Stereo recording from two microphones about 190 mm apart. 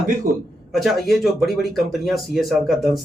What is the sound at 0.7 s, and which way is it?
Speech, centre (ahead or behind).